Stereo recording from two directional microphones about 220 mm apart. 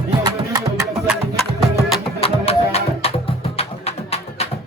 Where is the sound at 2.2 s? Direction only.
25° left (ahead or behind).